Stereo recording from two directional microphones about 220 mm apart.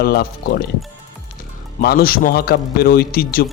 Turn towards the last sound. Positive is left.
turn(degrees=40)  # may be behind; listen again after turning